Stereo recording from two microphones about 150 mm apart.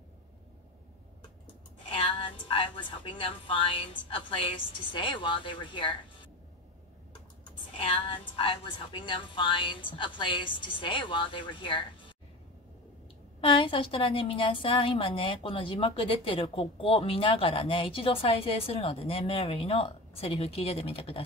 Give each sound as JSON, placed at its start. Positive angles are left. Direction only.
{"t": 1.9, "sound": "a woman's voice", "side_deg": 40}
{"t": 7.7, "sound": "a woman's voice", "side_deg": 40}
{"t": 13.4, "sound": "a woman's voice", "side_deg": 35}